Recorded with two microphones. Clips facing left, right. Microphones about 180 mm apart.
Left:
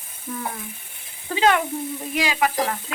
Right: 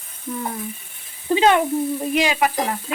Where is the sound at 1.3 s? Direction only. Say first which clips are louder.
Right 4 dB; 25° right (ahead or behind).